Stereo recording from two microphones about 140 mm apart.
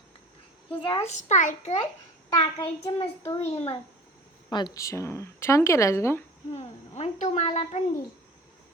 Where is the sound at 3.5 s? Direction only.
40° left (ahead or behind); by 6.2 s 20° left (ahead or behind).